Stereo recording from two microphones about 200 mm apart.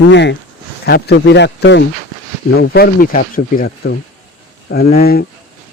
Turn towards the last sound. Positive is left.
turn(degrees=50)  # may be behind; listen again after turning